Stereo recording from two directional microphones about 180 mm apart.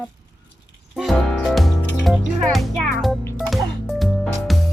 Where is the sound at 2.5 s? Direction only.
Centre (ahead or behind).